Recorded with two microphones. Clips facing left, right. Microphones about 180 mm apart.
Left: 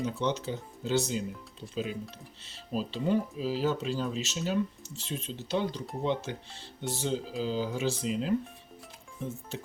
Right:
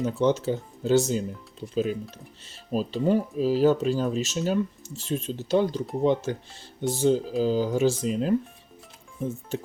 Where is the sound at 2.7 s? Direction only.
45° right (ahead or behind).